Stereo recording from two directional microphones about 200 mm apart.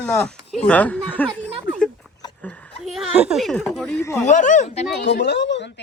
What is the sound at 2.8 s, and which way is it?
Speech, centre (ahead or behind).